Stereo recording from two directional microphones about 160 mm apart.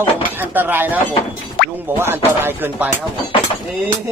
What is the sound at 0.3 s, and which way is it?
Speech, 10° right (ahead or behind).